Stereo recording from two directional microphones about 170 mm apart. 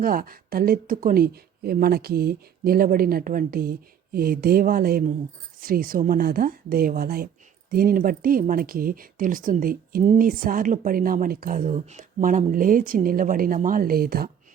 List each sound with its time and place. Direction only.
0.0 s speech: 55° right (ahead or behind)